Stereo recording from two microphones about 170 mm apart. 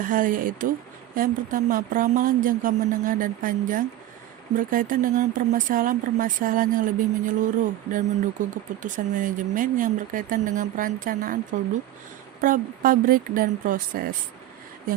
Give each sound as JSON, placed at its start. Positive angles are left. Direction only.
{"t": 0.0, "sound": "speech", "side_deg": -50}
{"t": 12.4, "sound": "speech", "side_deg": -55}